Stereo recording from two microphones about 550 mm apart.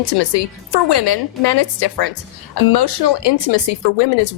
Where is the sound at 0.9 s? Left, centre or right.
Left.